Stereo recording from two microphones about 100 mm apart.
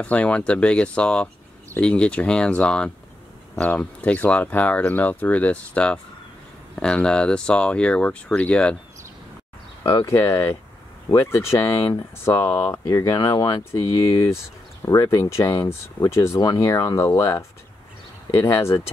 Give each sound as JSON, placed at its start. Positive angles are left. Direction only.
{"t": 0.0, "sound": "speech", "side_deg": 15}
{"t": 10.0, "sound": "speech", "side_deg": 25}